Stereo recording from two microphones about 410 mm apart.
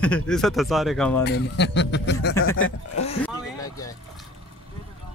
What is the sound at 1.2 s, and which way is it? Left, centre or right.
A man's voice, left.